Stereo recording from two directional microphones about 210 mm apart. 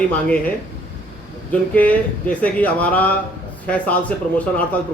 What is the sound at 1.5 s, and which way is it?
Speech, 5° left (ahead or behind).